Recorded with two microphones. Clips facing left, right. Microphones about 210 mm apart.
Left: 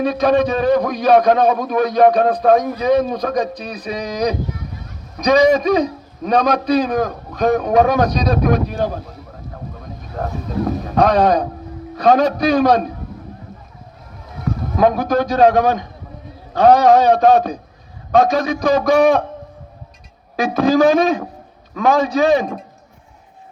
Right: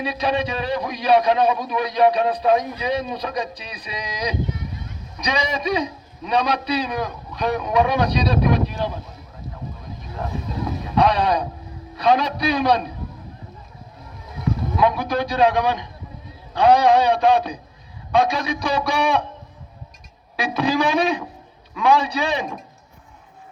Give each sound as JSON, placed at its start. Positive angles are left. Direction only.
{"t": 0.0, "sound": "a man's voice", "side_deg": 45}
{"t": 10.2, "sound": "a man's voice", "side_deg": 50}
{"t": 14.8, "sound": "a man's voice", "side_deg": 45}
{"t": 20.3, "sound": "a man's voice", "side_deg": 45}